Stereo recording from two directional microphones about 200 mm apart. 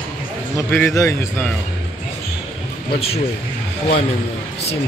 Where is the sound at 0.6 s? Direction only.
10° left (ahead or behind).